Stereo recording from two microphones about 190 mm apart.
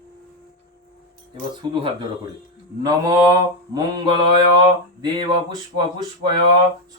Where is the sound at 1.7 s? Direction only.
25° right (ahead or behind).